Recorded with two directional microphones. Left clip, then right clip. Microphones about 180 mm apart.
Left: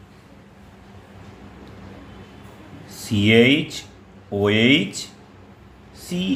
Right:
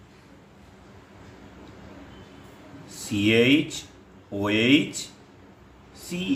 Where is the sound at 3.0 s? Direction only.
25° left (ahead or behind).